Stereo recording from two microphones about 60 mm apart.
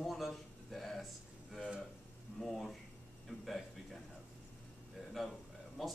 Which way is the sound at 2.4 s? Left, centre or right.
Centre.